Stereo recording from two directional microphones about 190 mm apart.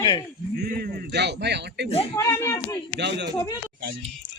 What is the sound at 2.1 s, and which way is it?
Speech, 15° left (ahead or behind).